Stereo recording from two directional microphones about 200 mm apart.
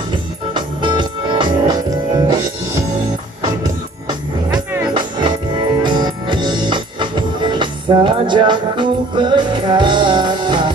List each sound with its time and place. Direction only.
0.6 s music: 25° right (ahead or behind)
5.8 s music: 20° right (ahead or behind)